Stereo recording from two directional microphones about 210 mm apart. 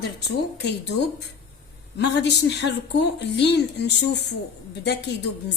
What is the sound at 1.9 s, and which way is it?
A woman's voice, 55° left (ahead or behind).